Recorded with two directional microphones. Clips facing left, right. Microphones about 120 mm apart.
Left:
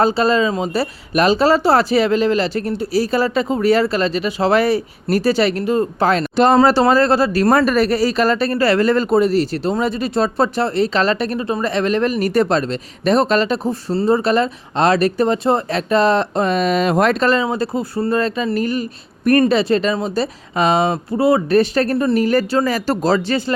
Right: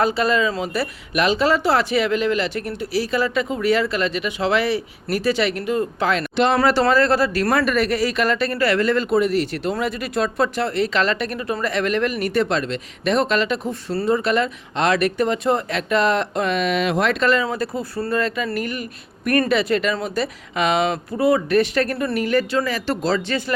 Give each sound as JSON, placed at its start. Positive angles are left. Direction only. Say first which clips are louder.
{"t": 0.0, "sound": "speech", "louder": "left 4 dB", "side_deg": 30}
{"t": 6.6, "sound": "speech", "louder": "left 4 dB", "side_deg": 30}